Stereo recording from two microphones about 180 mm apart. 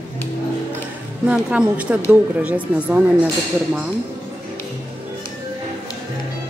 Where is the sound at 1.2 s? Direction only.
5° right (ahead or behind).